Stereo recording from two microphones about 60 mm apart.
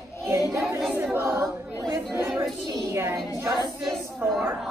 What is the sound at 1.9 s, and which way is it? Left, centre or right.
Chatter, right.